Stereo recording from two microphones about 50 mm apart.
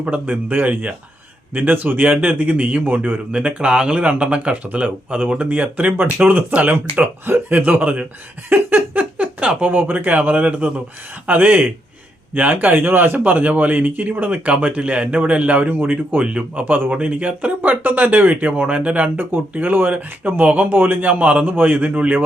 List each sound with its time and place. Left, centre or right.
0.0 s speech: right
2.8 s speech: right
3.3 s speech: right
16.6 s speech: right
19.1 s speech: right
21.4 s speech: right